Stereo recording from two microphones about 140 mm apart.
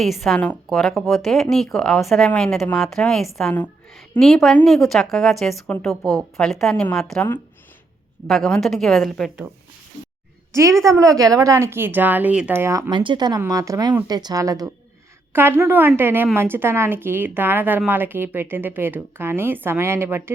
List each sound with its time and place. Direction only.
0.0 s a woman's voice: centre (ahead or behind)
10.5 s a woman's voice: 20° right (ahead or behind)
12.9 s a woman's voice: 35° right (ahead or behind); by 20.3 s 15° right (ahead or behind)